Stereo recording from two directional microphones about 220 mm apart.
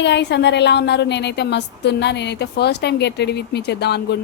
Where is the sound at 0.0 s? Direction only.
50° left (ahead or behind).